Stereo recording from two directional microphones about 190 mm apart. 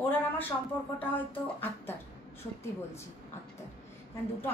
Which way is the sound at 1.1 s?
10° left (ahead or behind).